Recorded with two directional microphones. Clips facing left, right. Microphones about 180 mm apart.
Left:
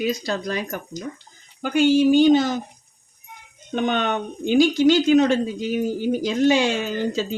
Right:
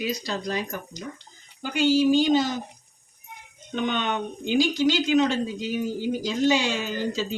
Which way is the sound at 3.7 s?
50° left (ahead or behind).